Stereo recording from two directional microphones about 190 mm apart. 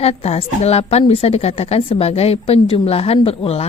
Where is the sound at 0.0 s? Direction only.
35° left (ahead or behind).